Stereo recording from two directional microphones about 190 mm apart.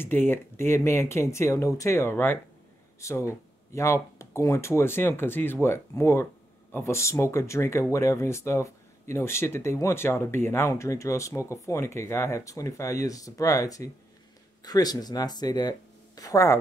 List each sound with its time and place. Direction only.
0.0 s speech: 10° left (ahead or behind)